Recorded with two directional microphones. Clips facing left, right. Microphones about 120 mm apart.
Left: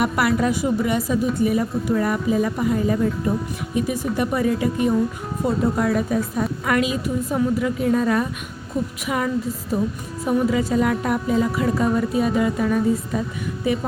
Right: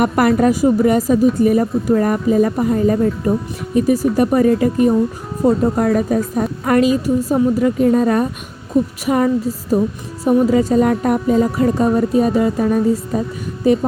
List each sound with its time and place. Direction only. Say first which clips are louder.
0.0 s a woman's voice: right 6 dB; 45° right (ahead or behind)